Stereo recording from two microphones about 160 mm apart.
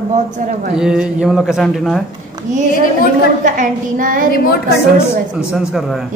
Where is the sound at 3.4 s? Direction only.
55° right (ahead or behind).